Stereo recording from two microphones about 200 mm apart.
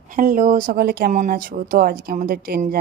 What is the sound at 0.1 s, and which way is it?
A woman's voice, 40° right (ahead or behind).